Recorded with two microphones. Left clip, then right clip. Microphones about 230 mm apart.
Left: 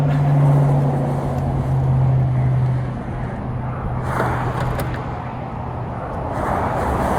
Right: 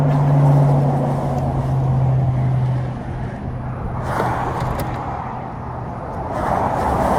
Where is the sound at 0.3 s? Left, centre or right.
Right.